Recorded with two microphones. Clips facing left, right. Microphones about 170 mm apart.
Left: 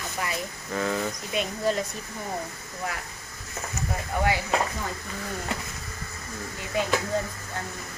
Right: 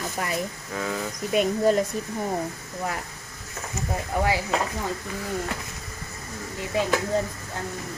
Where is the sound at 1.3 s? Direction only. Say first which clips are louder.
Right 7 dB; 50° right (ahead or behind).